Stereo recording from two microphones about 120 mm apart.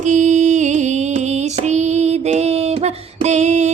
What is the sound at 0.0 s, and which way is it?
Music, 90° right.